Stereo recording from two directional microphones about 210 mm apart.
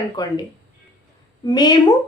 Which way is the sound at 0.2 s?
20° left (ahead or behind).